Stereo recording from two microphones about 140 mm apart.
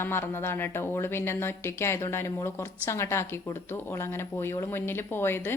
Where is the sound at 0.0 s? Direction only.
15° left (ahead or behind).